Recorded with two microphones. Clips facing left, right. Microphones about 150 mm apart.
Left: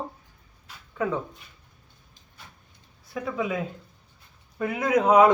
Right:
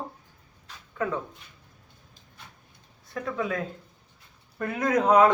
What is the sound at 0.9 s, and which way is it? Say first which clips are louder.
Speech: left 2 dB; 15° left (ahead or behind).